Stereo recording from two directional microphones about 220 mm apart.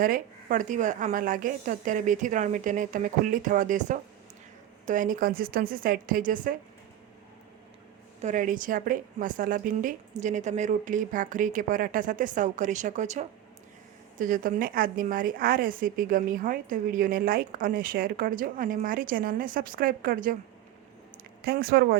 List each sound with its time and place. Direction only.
0.0 s a woman's voice: 40° right (ahead or behind)
8.2 s a woman's voice: 35° right (ahead or behind)
21.4 s speech: 45° right (ahead or behind)